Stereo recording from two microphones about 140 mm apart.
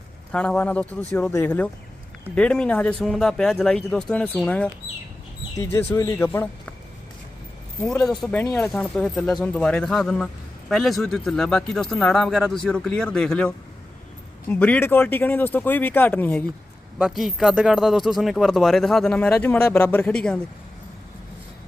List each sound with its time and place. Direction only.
0.3 s speech: 10° left (ahead or behind)
8.0 s speech: centre (ahead or behind)
8.4 s speech: 20° left (ahead or behind)
8.7 s speech: 5° left (ahead or behind)
14.5 s speech: 10° left (ahead or behind)
17.0 s speech: centre (ahead or behind)